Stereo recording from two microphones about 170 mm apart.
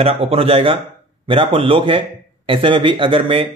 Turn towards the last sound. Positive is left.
turn(degrees=-30)  # may be behind; listen again after turning